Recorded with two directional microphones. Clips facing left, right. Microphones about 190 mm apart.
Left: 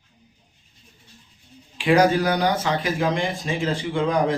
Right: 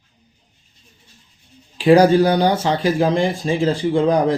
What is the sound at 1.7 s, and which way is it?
Speech, 35° right (ahead or behind).